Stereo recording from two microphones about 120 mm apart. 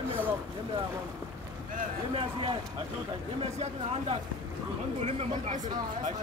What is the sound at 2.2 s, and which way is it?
Speech, 45° right (ahead or behind).